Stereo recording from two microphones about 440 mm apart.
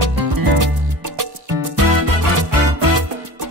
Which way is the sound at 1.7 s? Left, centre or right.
Right.